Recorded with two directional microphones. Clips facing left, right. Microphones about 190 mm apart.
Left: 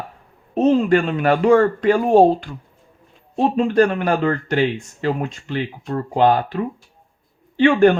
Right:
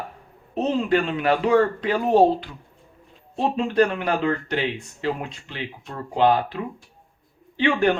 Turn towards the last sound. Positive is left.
turn(degrees=45)  # may be behind; listen again after turning